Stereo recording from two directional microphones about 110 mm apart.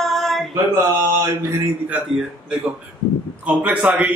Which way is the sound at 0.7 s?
25° right (ahead or behind).